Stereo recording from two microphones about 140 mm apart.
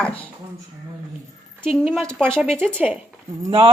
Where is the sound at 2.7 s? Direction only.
15° right (ahead or behind).